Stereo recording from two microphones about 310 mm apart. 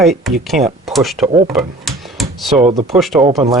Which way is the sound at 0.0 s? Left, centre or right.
Centre.